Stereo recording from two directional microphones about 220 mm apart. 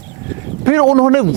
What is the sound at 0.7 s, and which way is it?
Speech, 15° right (ahead or behind).